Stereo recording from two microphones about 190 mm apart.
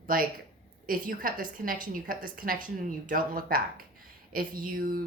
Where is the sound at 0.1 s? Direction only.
45° right (ahead or behind).